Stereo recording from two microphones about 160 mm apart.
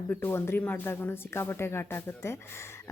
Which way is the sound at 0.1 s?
15° left (ahead or behind).